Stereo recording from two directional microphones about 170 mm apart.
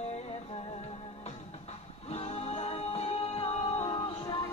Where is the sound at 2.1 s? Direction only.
35° left (ahead or behind).